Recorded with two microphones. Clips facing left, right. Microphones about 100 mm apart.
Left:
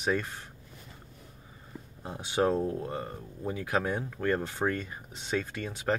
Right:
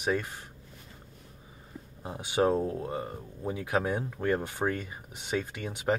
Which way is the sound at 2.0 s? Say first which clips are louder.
Right 1 dB; 10° right (ahead or behind).